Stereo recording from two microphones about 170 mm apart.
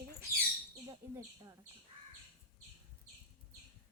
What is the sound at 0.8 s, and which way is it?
Speech, 15° right (ahead or behind).